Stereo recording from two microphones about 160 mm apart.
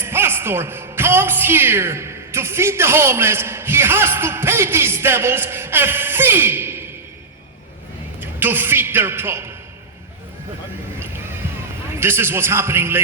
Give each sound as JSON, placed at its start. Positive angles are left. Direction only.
{"t": 0.0, "sound": "a woman's voice", "side_deg": -15}
{"t": 8.2, "sound": "a man's voice", "side_deg": -15}
{"t": 11.9, "sound": "a woman's voice", "side_deg": -15}